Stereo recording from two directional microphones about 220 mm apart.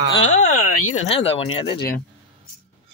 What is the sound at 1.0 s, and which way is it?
Speech, 25° left (ahead or behind).